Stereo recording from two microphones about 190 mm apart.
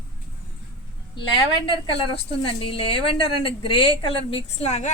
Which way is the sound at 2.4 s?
30° left (ahead or behind).